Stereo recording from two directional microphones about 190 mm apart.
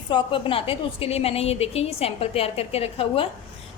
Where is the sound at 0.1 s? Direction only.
25° left (ahead or behind).